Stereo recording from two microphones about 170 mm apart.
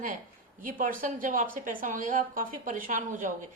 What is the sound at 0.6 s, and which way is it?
A woman's voice, 55° right (ahead or behind).